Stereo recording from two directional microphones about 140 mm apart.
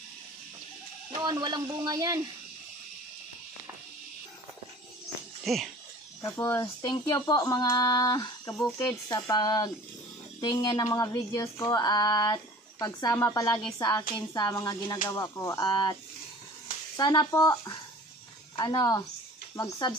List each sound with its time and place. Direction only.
1.1 s speech: 30° right (ahead or behind)
5.4 s speech: centre (ahead or behind)
6.3 s speech: 25° left (ahead or behind)